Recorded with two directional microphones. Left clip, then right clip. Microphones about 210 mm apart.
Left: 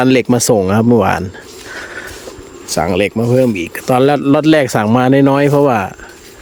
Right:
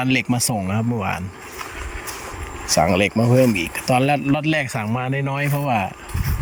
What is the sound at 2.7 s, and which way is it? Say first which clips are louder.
Speech: left 3 dB; 10° left (ahead or behind).